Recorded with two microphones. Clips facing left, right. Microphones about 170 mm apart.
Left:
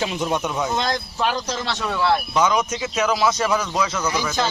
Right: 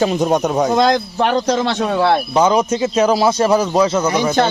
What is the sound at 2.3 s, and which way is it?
A man's voice, 30° right (ahead or behind).